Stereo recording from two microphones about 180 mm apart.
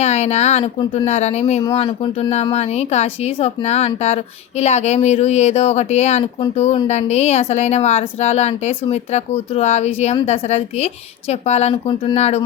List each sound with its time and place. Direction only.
0.0 s speech: 35° left (ahead or behind)